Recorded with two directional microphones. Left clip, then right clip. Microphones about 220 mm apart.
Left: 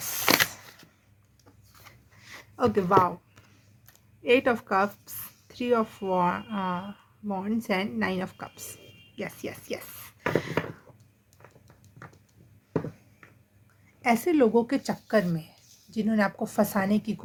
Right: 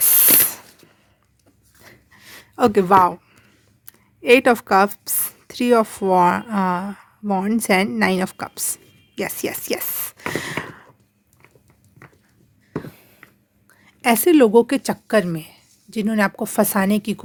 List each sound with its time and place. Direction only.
0.0 s spray: 40° right (ahead or behind)
2.6 s a woman's voice: 45° right (ahead or behind)
4.2 s a woman's voice: 50° right (ahead or behind)
9.1 s a sound: 50° right (ahead or behind)
14.0 s a woman's voice: 45° right (ahead or behind)